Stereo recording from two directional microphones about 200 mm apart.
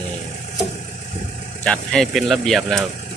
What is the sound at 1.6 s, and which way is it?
Speech, centre (ahead or behind).